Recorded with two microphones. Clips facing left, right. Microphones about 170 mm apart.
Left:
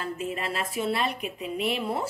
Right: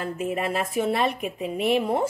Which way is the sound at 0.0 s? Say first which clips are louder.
Right 4 dB; 55° right (ahead or behind).